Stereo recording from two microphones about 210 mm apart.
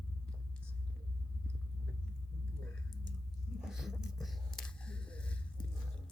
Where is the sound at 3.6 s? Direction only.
Centre (ahead or behind).